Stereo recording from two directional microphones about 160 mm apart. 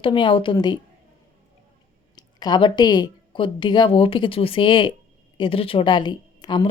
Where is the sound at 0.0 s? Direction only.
30° left (ahead or behind).